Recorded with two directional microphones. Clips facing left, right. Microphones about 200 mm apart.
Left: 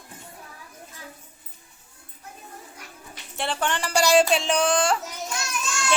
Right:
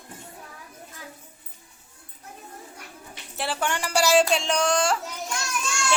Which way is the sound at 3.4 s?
5° right (ahead or behind).